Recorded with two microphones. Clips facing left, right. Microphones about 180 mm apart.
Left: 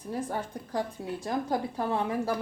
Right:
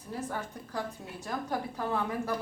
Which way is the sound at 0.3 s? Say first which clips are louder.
Left 4 dB; 30° left (ahead or behind).